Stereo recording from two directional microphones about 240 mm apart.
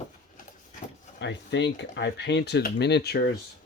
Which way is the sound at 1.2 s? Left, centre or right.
Left.